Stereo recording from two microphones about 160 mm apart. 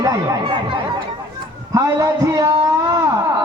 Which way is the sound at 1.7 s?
20° right (ahead or behind).